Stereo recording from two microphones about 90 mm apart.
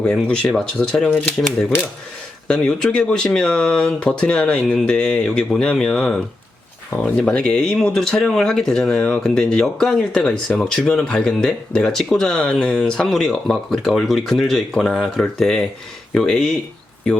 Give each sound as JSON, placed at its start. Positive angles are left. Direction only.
{"t": 0.0, "sound": "speech", "side_deg": 10}
{"t": 2.5, "sound": "speech", "side_deg": 10}